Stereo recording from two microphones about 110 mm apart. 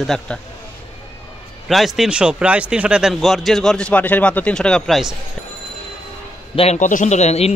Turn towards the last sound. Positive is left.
turn(degrees=75)  # may be behind; listen again after turning